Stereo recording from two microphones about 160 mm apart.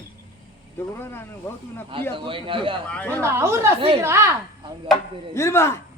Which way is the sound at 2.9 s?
10° left (ahead or behind).